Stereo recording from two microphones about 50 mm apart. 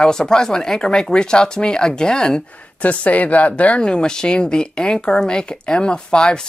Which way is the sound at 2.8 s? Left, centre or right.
Left.